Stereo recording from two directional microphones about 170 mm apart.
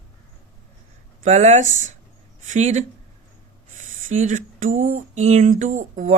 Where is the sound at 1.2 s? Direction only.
40° right (ahead or behind).